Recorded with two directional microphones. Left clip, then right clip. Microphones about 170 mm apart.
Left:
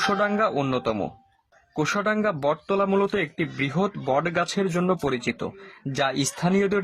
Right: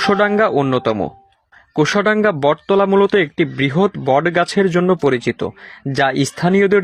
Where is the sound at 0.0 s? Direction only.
35° right (ahead or behind).